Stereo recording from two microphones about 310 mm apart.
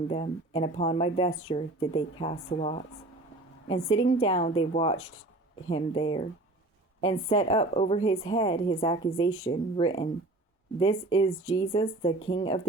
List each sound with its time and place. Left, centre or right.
0.1 s a woman's voice: centre